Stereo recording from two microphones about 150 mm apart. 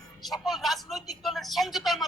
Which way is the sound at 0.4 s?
Centre (ahead or behind).